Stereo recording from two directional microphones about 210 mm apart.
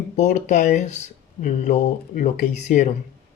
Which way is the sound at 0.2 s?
35° left (ahead or behind).